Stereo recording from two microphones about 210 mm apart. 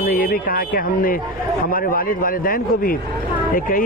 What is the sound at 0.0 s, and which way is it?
A man's voice, 45° left (ahead or behind).